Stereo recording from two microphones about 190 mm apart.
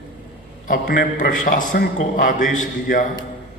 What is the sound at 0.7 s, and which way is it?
A man's voice, 45° left (ahead or behind).